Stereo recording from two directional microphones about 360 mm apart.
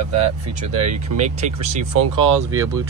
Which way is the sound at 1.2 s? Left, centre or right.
Centre.